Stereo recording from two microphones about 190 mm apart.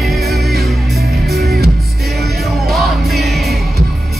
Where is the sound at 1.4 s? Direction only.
55° right (ahead or behind).